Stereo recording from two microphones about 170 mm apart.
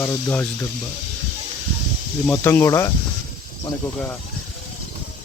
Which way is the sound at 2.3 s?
15° left (ahead or behind).